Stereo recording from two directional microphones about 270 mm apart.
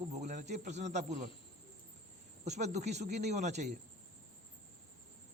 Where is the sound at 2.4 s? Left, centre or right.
Right.